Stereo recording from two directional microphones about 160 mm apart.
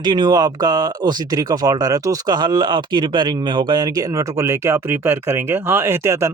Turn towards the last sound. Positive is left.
turn(degrees=-15)  # may be behind; listen again after turning